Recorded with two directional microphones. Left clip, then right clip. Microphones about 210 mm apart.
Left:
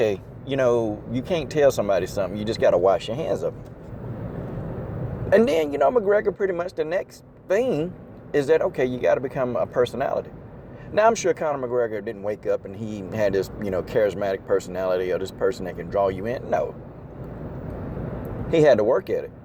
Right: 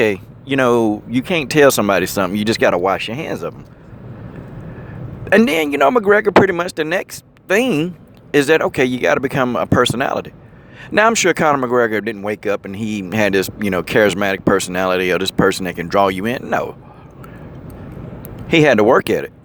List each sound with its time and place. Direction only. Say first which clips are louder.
0.0 s speech: right 6 dB; 30° right (ahead or behind)
5.3 s speech: right 5 dB; 30° right (ahead or behind)
18.2 s speech: right 5 dB; 35° right (ahead or behind)